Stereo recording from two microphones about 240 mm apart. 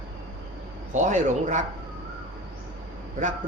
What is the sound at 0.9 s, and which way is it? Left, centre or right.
Speech, right.